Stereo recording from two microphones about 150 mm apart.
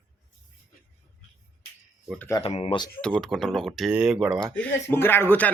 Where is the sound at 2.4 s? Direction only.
40° left (ahead or behind).